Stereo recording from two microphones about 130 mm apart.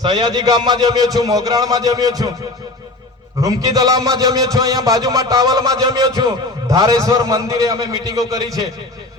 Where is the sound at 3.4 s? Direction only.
30° right (ahead or behind).